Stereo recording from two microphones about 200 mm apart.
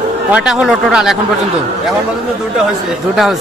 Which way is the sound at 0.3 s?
5° right (ahead or behind).